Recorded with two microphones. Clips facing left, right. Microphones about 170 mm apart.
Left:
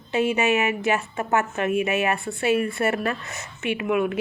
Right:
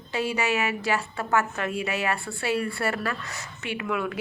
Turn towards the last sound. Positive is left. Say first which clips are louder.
# left 6 dB
turn(degrees=20)  # may be behind; listen again after turning